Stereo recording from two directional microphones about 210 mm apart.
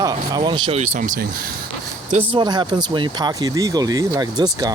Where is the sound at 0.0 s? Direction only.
20° right (ahead or behind).